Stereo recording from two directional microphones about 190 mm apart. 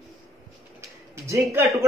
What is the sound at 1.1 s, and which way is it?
Speech, 15° right (ahead or behind).